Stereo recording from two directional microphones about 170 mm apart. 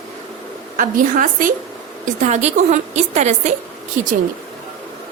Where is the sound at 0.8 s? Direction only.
50° right (ahead or behind).